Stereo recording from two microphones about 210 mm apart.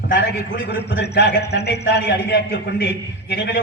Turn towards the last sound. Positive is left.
turn(degrees=55)  # may be behind; listen again after turning